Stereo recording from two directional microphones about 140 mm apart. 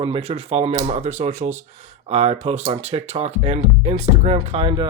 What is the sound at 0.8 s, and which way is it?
Speech, 55° right (ahead or behind).